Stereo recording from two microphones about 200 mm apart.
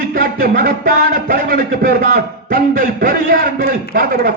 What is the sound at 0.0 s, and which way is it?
A man's voice, 50° right (ahead or behind).